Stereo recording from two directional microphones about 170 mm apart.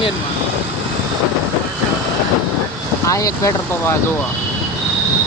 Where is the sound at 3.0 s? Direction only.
20° left (ahead or behind).